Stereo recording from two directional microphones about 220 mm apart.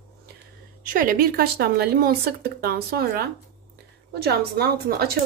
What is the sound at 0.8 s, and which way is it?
A woman's voice, 40° right (ahead or behind).